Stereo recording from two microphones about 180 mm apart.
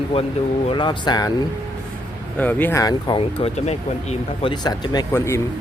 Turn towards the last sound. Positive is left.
turn(degrees=15)  # may be behind; listen again after turning